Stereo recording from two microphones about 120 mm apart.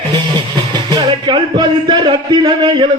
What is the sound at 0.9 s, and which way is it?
Speech, 35° right (ahead or behind).